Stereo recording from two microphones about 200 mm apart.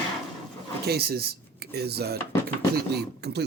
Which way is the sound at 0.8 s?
50° right (ahead or behind).